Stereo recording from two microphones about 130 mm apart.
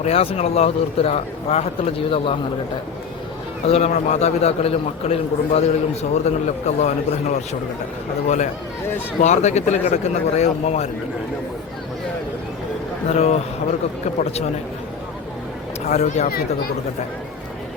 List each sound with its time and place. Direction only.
0.0 s a man's voice: 50° left (ahead or behind)
3.7 s a man's voice: 60° left (ahead or behind)
9.2 s a man's voice: 65° left (ahead or behind)
13.1 s a man's voice: 55° left (ahead or behind)
15.9 s a man's voice: 60° left (ahead or behind)